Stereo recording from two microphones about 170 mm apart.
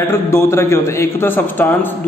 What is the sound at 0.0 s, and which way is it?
A man's voice, 15° left (ahead or behind).